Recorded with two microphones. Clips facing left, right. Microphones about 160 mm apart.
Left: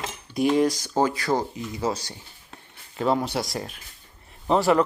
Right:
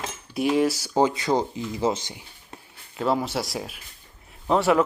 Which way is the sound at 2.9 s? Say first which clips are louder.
Left 1 dB; centre (ahead or behind).